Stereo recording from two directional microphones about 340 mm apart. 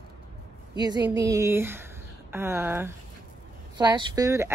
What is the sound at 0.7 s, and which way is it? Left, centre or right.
Speech, centre.